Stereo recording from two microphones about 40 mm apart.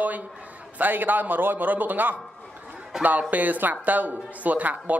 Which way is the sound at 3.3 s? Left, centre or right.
Right.